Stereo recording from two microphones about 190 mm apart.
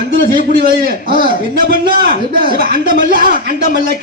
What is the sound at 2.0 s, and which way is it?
Speech, 50° right (ahead or behind).